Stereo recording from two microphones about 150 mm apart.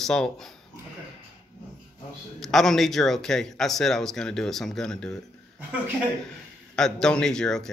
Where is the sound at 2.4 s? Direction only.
Centre (ahead or behind).